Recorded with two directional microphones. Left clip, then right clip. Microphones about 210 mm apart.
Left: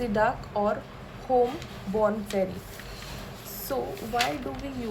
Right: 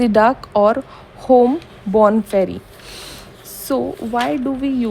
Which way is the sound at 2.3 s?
55° right (ahead or behind).